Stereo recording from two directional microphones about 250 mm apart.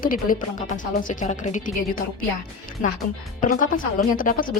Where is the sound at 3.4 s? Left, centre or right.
Left.